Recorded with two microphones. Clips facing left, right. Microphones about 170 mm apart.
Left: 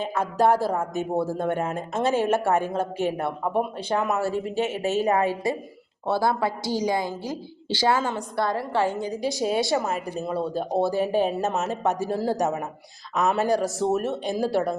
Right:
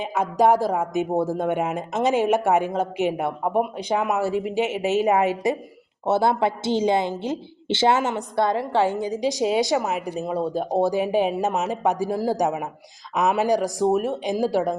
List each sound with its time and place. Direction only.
0.0 s a woman's voice: 15° right (ahead or behind)